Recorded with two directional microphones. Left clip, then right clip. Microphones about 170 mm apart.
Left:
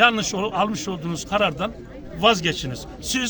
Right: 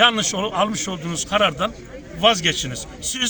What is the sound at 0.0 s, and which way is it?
A man's voice, 15° left (ahead or behind).